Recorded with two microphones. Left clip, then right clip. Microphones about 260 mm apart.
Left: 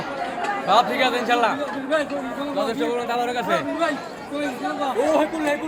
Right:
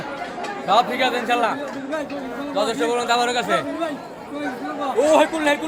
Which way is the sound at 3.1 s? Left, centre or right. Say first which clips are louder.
Right 4 dB; right.